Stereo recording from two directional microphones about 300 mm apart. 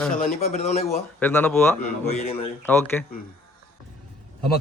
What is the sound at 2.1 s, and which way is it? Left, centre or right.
Speech, centre.